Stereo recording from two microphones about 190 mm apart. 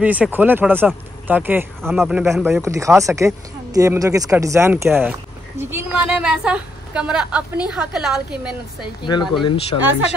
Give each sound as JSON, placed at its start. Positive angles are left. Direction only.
{"t": 0.0, "sound": "a woman's voice", "side_deg": -10}
{"t": 2.6, "sound": "a woman's voice", "side_deg": -15}
{"t": 8.8, "sound": "speech", "side_deg": 25}